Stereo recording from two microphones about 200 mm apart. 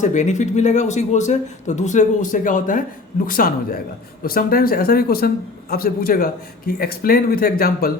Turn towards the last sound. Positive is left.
turn(degrees=50)  # may be behind; listen again after turning